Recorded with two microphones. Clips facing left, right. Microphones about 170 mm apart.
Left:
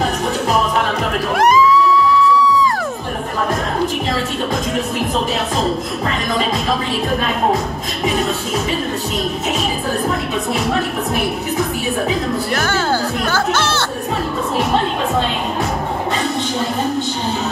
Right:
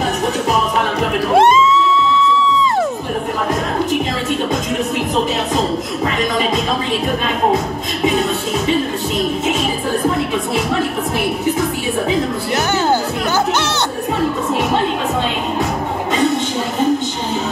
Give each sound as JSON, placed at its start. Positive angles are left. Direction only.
{"t": 1.3, "sound": "music", "side_deg": -25}
{"t": 12.5, "sound": "music", "side_deg": -20}